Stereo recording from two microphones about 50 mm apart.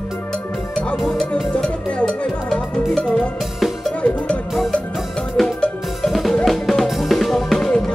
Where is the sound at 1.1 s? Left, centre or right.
Centre.